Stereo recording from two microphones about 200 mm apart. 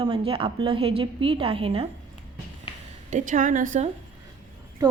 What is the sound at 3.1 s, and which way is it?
Speech, 40° right (ahead or behind).